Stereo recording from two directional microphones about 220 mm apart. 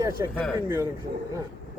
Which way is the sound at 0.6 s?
10° right (ahead or behind).